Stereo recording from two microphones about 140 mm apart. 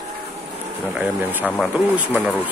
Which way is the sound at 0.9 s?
10° right (ahead or behind).